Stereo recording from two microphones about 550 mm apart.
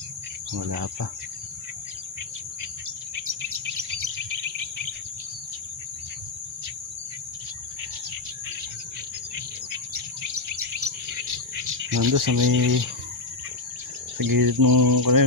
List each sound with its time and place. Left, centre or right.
0.6 s cricket: right
3.2 s bird vocalization: right
10.5 s bird: right
12.0 s cricket: right
14.1 s cricket: right